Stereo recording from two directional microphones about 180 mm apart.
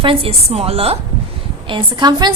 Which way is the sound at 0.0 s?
30° right (ahead or behind).